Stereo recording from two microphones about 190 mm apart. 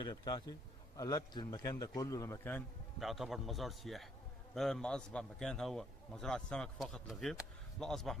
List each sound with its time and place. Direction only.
0.0 s a man's voice: 20° left (ahead or behind)
3.0 s a man's voice: centre (ahead or behind)